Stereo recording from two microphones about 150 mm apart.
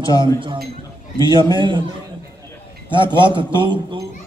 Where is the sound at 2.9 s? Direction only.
30° right (ahead or behind).